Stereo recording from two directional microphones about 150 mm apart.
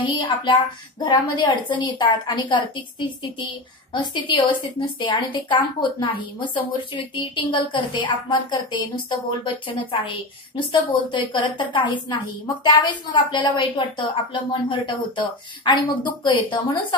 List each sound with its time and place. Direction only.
0.0 s a woman's voice: 35° left (ahead or behind)